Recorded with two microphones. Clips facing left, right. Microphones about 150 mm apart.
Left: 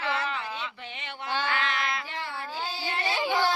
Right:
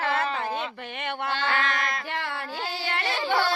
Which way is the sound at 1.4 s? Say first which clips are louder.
Right 3 dB; 45° right (ahead or behind).